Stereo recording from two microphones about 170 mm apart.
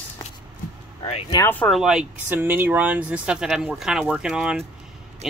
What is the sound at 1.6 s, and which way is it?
Speech, centre (ahead or behind).